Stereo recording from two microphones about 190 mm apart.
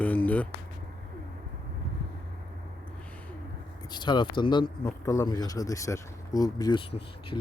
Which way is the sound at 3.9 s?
25° left (ahead or behind).